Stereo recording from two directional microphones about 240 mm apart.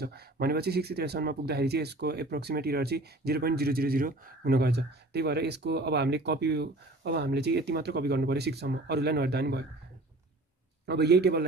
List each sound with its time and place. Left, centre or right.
0.0 s speech: right
10.9 s speech: right